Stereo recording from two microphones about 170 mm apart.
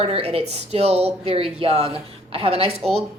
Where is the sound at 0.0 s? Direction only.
35° right (ahead or behind).